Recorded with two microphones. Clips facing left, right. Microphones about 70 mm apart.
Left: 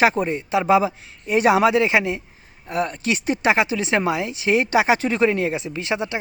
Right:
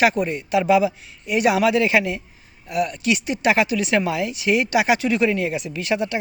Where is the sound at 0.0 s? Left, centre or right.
Left.